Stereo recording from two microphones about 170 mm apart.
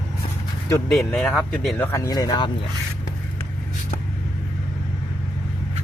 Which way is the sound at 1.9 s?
20° left (ahead or behind).